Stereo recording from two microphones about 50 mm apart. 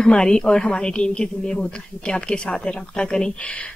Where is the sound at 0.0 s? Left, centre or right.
Centre.